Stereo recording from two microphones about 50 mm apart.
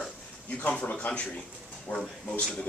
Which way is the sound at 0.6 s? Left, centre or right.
Left.